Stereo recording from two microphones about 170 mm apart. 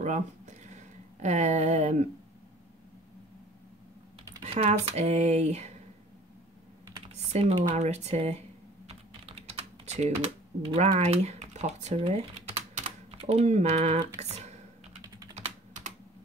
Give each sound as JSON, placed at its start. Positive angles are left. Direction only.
{"t": 0.0, "sound": "speech", "side_deg": -45}
{"t": 4.4, "sound": "speech", "side_deg": -40}
{"t": 7.2, "sound": "computer keyboard", "side_deg": -40}
{"t": 7.7, "sound": "typing", "side_deg": -40}
{"t": 15.3, "sound": "computer keyboard", "side_deg": -45}